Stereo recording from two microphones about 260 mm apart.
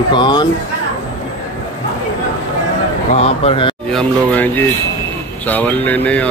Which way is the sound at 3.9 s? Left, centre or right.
Centre.